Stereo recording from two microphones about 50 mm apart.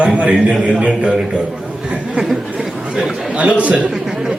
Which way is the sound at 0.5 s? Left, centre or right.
Centre.